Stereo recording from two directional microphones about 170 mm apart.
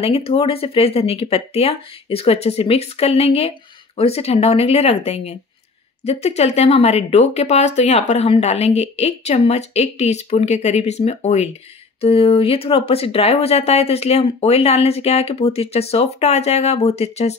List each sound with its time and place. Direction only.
0.0 s speech: 35° left (ahead or behind)